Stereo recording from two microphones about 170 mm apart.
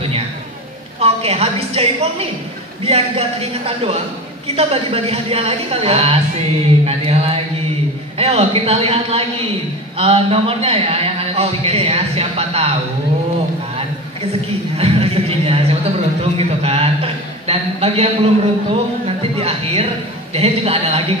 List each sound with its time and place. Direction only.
0.9 s a woman's voice: 35° right (ahead or behind)
14.8 s speech: 35° right (ahead or behind)